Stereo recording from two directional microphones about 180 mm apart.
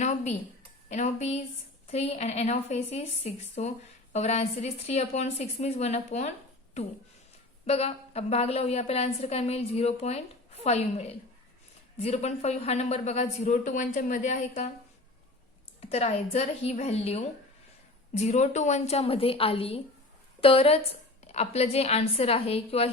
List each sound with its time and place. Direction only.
0.0 s a woman's voice: 40° left (ahead or behind)
7.7 s a woman's voice: 35° left (ahead or behind)
15.8 s a woman's voice: 35° left (ahead or behind)